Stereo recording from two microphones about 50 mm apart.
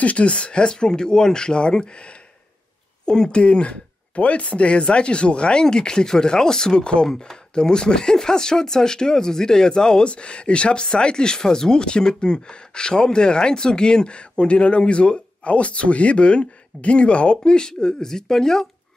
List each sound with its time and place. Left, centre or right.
0.0 s speech: left; by 18.7 s centre